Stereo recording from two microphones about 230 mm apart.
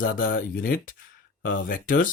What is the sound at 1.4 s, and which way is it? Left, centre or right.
Speech, left.